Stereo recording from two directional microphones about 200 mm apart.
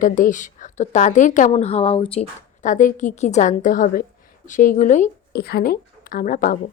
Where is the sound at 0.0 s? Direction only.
40° left (ahead or behind).